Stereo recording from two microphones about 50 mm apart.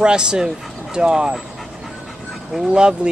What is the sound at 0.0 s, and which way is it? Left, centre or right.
Speech, centre.